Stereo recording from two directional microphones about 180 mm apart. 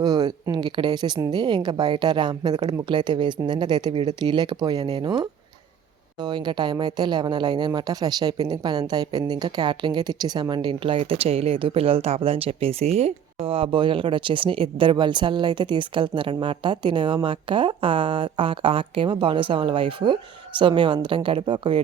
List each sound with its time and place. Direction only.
0.0 s speech: 20° right (ahead or behind)